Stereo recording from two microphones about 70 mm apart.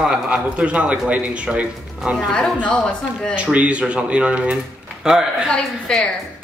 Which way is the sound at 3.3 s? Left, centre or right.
Centre.